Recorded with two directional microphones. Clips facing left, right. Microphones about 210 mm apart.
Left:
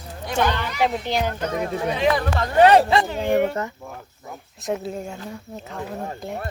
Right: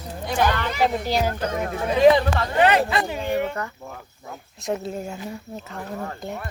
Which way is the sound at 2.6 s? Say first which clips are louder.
Left 5 dB; 35° left (ahead or behind).